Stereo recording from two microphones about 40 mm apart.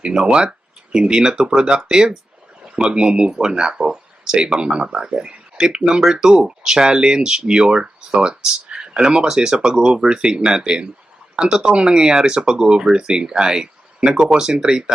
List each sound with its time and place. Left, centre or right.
0.0 s speech: centre